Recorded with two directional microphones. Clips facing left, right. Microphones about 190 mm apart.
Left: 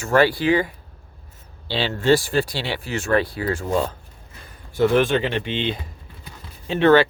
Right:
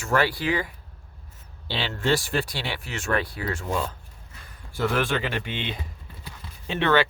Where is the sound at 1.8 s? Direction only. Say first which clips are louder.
Left 7 dB; 30° left (ahead or behind).